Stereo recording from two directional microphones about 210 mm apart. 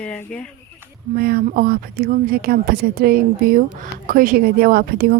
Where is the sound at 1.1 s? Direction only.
45° right (ahead or behind).